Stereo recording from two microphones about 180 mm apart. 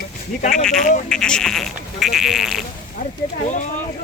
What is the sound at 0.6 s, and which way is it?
Speech, 5° left (ahead or behind).